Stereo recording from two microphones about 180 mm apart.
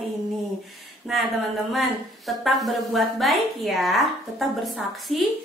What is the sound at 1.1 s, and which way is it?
A woman's voice, centre (ahead or behind).